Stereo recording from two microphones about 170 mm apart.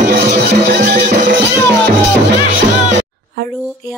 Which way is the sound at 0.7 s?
65° right (ahead or behind).